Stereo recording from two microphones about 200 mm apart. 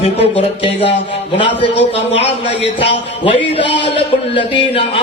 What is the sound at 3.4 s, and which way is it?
Speech, 60° left (ahead or behind).